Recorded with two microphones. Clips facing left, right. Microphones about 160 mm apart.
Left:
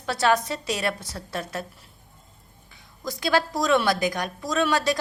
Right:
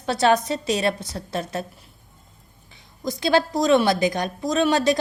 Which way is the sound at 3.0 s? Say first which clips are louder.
Right 4 dB; 25° right (ahead or behind).